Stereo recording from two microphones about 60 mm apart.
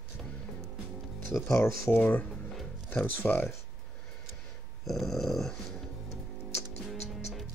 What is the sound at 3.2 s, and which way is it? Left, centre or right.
Speech, left.